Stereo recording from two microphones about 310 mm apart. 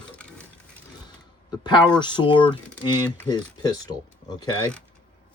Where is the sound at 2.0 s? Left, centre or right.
Centre.